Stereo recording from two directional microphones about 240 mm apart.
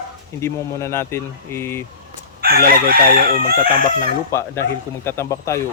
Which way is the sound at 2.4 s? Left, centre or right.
Right.